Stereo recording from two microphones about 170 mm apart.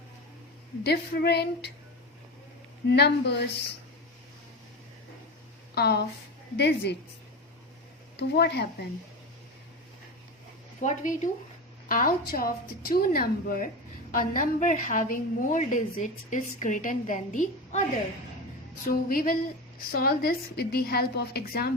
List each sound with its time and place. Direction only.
0.9 s a woman's voice: 70° left (ahead or behind)
2.9 s a woman's voice: 75° left (ahead or behind)
5.7 s a woman's voice: 70° left (ahead or behind)
6.6 s a woman's voice: 85° left
8.1 s a woman's voice: 75° left (ahead or behind)
10.8 s a woman's voice: 45° left (ahead or behind)
19.0 s a woman's voice: 55° left (ahead or behind)